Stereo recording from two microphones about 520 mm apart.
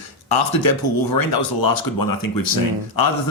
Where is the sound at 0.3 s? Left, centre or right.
Left.